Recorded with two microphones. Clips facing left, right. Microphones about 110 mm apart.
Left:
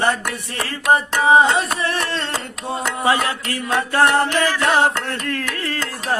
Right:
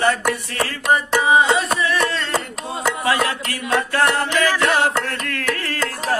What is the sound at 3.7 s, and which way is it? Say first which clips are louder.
Music: left 2 dB; 30° left (ahead or behind).